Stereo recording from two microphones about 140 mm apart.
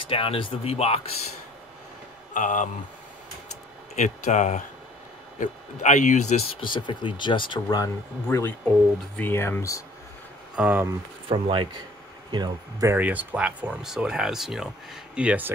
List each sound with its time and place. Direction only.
0.1 s speech: 40° left (ahead or behind)
2.3 s speech: 65° left (ahead or behind)
3.9 s speech: 55° left (ahead or behind)
6.6 s speech: 35° left (ahead or behind)
10.5 s speech: 10° right (ahead or behind)
11.2 s speech: 35° right (ahead or behind)
12.8 s speech: 10° right (ahead or behind)